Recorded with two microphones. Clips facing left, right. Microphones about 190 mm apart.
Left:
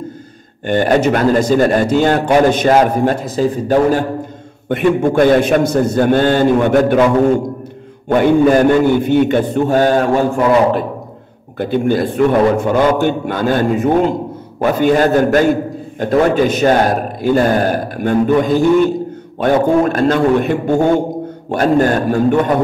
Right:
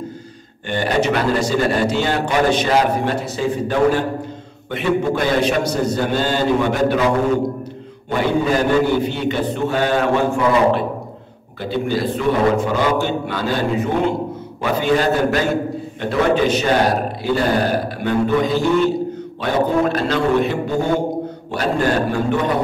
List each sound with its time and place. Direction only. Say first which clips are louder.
0.7 s a man's voice: left 6 dB; 45° left (ahead or behind)
4.6 s a man's voice: left 5 dB; 50° left (ahead or behind)
8.2 s a man's voice: left 7 dB; 55° left (ahead or behind)